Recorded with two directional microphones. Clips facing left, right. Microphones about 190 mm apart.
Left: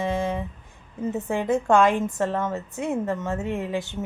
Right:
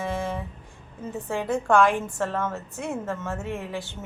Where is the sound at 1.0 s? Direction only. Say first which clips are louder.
Left 4 dB; 15° left (ahead or behind).